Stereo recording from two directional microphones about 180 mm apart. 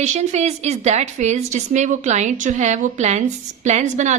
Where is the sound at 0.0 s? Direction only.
40° right (ahead or behind).